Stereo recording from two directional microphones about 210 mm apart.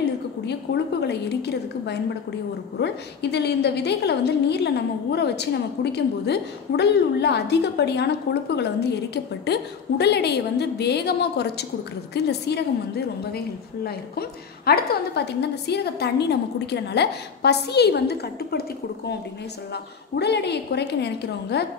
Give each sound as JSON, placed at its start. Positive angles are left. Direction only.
{"t": 0.5, "sound": "a woman's voice", "side_deg": 55}